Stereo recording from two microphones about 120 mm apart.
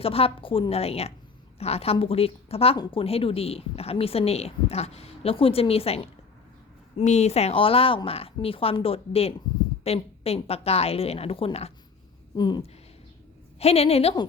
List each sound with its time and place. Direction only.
0.0 s a woman's voice: 55° left (ahead or behind)
6.9 s a woman's voice: 70° left (ahead or behind)
12.4 s speech: 35° left (ahead or behind)
13.6 s a woman's voice: 60° left (ahead or behind)